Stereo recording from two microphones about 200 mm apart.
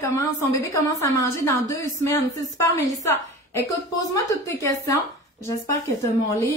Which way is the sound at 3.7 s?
15° left (ahead or behind).